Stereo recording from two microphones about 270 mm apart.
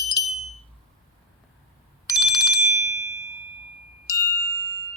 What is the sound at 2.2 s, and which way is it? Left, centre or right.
Telephone bell ringing, centre.